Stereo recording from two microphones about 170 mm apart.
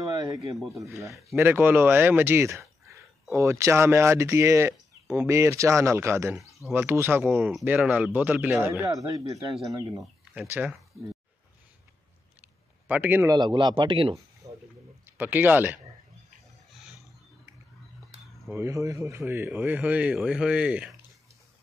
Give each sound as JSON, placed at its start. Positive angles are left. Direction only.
{"t": 0.1, "sound": "a sound", "side_deg": -20}
{"t": 1.3, "sound": "speech", "side_deg": -10}
{"t": 12.8, "sound": "speech", "side_deg": -10}
{"t": 13.3, "sound": "speech", "side_deg": -25}
{"t": 14.4, "sound": "a sound", "side_deg": -20}
{"t": 15.1, "sound": "speech", "side_deg": -10}
{"t": 18.5, "sound": "speech", "side_deg": -15}